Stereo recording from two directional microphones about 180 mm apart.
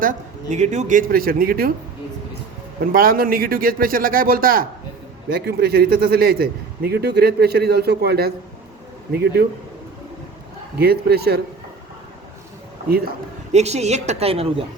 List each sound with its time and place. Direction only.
0.0 s a man's voice: 45° right (ahead or behind)
2.9 s a man's voice: 55° right (ahead or behind)
10.8 s a man's voice: 60° right (ahead or behind)
13.5 s a woman's voice: 40° right (ahead or behind)